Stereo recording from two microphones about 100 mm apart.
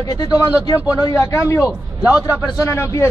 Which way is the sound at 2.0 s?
15° right (ahead or behind).